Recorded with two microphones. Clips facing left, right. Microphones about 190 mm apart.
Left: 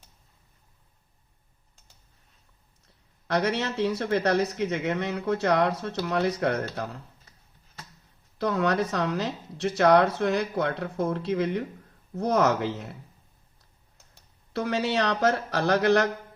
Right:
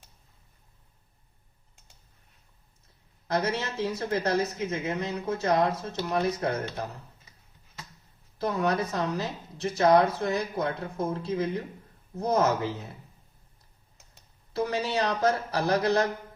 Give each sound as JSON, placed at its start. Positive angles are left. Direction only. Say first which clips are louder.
{"t": 3.2, "sound": "a woman's voice", "louder": "left 2 dB", "side_deg": 70}
{"t": 8.4, "sound": "a woman's voice", "louder": "left 2 dB", "side_deg": 75}
{"t": 14.5, "sound": "a woman's voice", "louder": "left 2 dB", "side_deg": 75}